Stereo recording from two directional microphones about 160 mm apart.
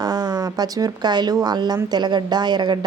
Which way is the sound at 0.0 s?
25° right (ahead or behind).